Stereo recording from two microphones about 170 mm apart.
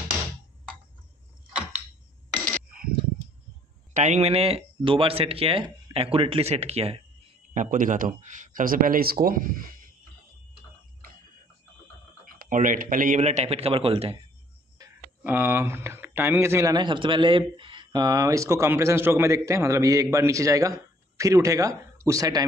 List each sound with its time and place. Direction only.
3.9 s speech: 45° right (ahead or behind)
7.5 s speech: 50° right (ahead or behind)
12.4 s speech: 50° right (ahead or behind); by 14.2 s 35° right (ahead or behind)
15.2 s speech: 15° right (ahead or behind)